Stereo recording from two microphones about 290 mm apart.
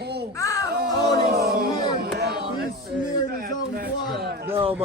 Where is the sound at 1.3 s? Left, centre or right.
Right.